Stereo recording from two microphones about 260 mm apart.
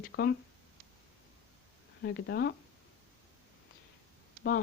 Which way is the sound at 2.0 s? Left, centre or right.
Left.